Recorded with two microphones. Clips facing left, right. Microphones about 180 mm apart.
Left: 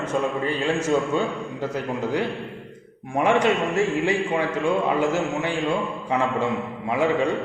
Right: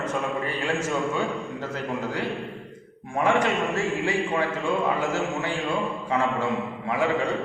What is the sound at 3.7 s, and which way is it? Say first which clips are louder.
A man's voice: left 4 dB; 20° left (ahead or behind).